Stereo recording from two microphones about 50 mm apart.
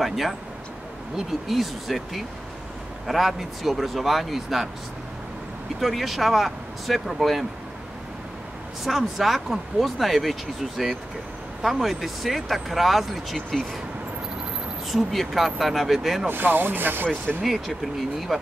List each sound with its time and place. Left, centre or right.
0.0 s speech: centre
1.5 s speech: centre
5.8 s speech: centre
8.8 s speech: centre
11.6 s speech: centre
14.9 s speech: centre
16.3 s speech: right
18.3 s speech: centre